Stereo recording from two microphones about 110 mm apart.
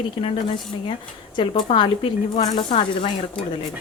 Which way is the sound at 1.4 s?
45° left (ahead or behind).